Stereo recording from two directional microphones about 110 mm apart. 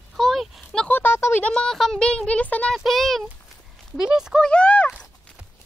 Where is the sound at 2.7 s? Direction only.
Centre (ahead or behind).